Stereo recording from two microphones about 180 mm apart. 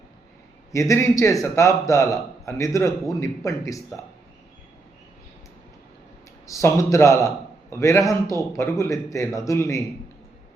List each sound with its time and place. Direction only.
0.7 s a man's voice: 15° left (ahead or behind)
6.5 s a man's voice: 15° left (ahead or behind)